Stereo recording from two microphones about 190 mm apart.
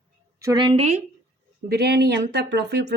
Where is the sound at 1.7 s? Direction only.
60° right (ahead or behind).